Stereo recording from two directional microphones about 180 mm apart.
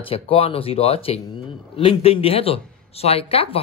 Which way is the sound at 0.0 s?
30° left (ahead or behind).